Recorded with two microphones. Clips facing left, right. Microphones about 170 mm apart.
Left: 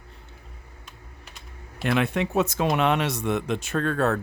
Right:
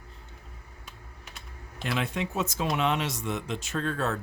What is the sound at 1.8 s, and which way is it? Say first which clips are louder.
Speech: left 7 dB; 60° left (ahead or behind).